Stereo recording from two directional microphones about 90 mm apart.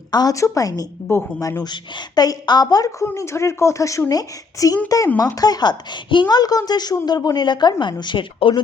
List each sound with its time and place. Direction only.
0.1 s a woman's voice: 50° left (ahead or behind)
0.3 s a woman's voice: 35° left (ahead or behind)
1.1 s speech: 30° left (ahead or behind)
1.6 s a woman's voice: 50° left (ahead or behind); by 8.6 s 70° left (ahead or behind)